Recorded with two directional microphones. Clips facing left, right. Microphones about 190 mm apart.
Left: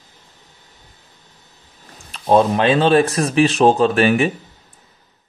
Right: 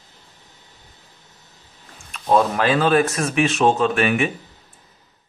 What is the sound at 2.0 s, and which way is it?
Speech, 35° left (ahead or behind).